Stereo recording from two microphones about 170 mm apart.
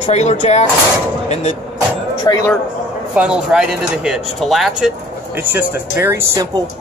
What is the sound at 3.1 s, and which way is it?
Speech, 5° right (ahead or behind).